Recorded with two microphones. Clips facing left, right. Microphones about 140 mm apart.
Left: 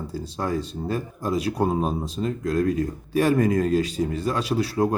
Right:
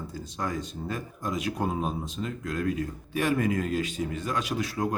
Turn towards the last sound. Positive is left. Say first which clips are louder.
# left 7 dB
turn(degrees=35)  # may be behind; listen again after turning